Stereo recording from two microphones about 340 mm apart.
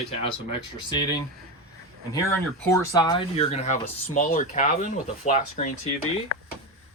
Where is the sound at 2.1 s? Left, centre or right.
Centre.